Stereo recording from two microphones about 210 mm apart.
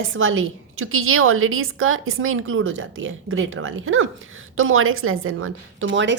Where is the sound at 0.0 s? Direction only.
70° right (ahead or behind).